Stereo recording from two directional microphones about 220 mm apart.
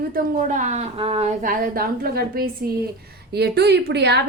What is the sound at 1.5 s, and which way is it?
A woman's voice, 40° right (ahead or behind).